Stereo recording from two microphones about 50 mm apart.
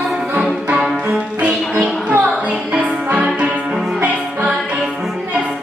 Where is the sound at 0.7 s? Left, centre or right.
Centre.